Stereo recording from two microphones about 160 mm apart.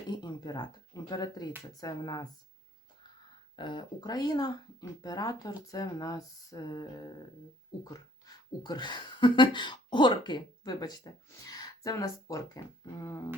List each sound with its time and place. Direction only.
0.1 s speech: 25° left (ahead or behind)
3.5 s speech: 30° left (ahead or behind)